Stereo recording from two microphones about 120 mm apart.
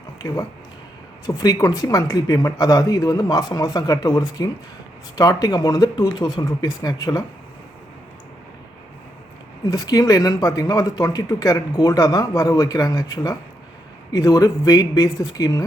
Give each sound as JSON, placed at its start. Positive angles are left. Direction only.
{"t": 1.3, "sound": "speech", "side_deg": 30}
{"t": 9.6, "sound": "speech", "side_deg": 30}